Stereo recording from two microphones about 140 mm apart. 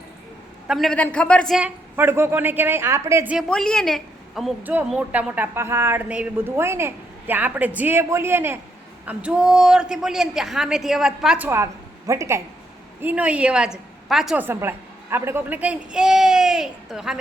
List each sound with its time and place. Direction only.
0.7 s a woman's voice: centre (ahead or behind)
1.5 s a woman's voice: 10° right (ahead or behind)
3.5 s a woman's voice: 5° left (ahead or behind)
4.6 s a woman's voice: 10° right (ahead or behind)
11.4 s a woman's voice: 20° right (ahead or behind)
13.0 s a woman's voice: 10° right (ahead or behind)
14.4 s a woman's voice: 15° right (ahead or behind)